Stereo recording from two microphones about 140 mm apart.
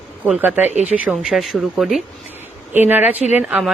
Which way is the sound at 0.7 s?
55° right (ahead or behind).